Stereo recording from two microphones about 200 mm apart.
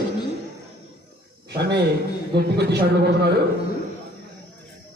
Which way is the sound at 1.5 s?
55° right (ahead or behind).